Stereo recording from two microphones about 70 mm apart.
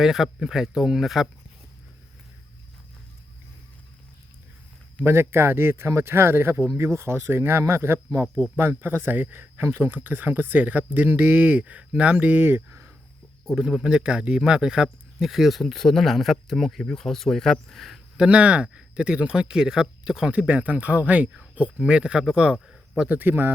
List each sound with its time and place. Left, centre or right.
0.0 s speech: centre
5.0 s speech: right
13.4 s speech: centre
18.2 s speech: centre
22.6 s a sound: centre
23.0 s speech: right